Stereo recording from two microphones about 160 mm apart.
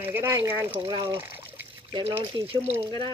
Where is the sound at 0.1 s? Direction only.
15° right (ahead or behind).